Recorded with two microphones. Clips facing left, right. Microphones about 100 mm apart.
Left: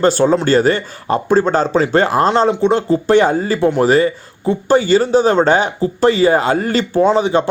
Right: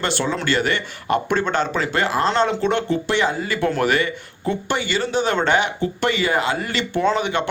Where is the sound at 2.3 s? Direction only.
25° left (ahead or behind).